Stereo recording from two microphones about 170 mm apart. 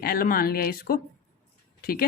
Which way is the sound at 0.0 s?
60° left (ahead or behind).